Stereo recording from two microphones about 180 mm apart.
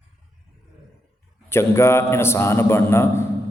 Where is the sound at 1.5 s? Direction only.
15° left (ahead or behind).